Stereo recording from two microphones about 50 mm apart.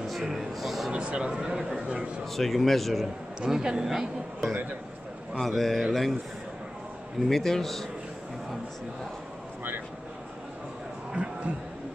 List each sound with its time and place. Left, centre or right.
0.0 s music: centre
0.9 s a man's voice: centre
2.3 s speech: centre
3.3 s speech: centre
7.2 s a man's voice: centre
11.2 s a sound: right